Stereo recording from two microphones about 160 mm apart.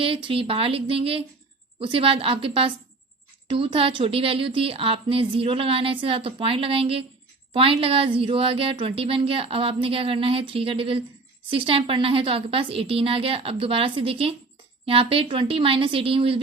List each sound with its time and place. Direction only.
0.0 s a woman's voice: 35° right (ahead or behind)